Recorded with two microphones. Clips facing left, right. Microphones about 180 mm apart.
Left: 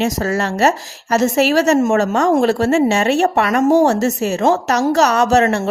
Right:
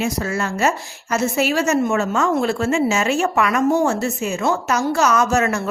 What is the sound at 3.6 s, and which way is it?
Speech, 90° left.